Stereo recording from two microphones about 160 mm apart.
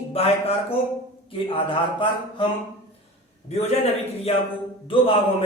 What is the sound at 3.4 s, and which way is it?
A man's voice, 40° left (ahead or behind).